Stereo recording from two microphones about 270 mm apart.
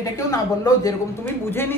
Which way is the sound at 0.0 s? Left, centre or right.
Centre.